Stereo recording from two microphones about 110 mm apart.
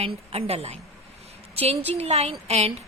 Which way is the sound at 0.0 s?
65° right (ahead or behind).